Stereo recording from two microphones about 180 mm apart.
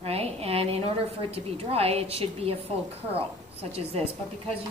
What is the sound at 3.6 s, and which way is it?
Speech, 35° right (ahead or behind).